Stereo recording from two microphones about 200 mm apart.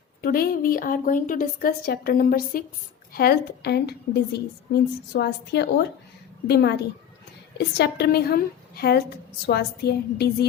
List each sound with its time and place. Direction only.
0.2 s a woman's voice: 50° left (ahead or behind)
7.8 s a woman's voice: 55° left (ahead or behind)